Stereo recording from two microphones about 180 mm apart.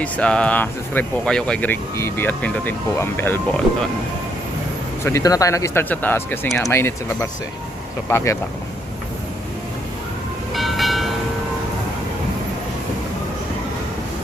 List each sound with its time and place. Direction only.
0.0 s speech: 5° left (ahead or behind)
5.0 s speech: 20° left (ahead or behind)
10.5 s train: centre (ahead or behind)